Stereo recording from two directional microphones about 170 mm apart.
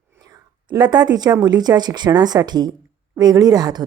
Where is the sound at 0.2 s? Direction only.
25° right (ahead or behind).